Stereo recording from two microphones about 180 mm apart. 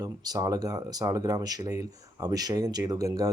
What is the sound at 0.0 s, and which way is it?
Speech, 20° right (ahead or behind).